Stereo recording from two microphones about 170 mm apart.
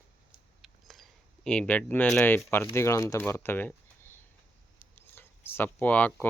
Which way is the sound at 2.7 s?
15° left (ahead or behind).